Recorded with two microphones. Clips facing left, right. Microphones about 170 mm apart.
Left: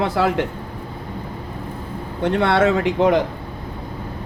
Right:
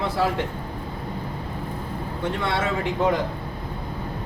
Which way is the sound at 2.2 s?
70° left (ahead or behind).